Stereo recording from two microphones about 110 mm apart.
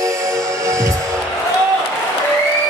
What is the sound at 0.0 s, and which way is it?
Music, 30° right (ahead or behind).